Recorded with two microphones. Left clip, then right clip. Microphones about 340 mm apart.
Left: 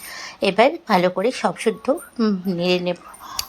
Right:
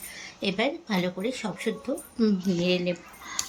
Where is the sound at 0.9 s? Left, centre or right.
Left.